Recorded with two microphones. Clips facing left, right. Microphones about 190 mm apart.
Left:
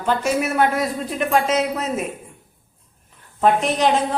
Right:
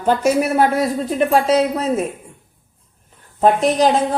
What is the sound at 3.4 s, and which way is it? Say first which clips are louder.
Speech: right 3 dB; 35° right (ahead or behind).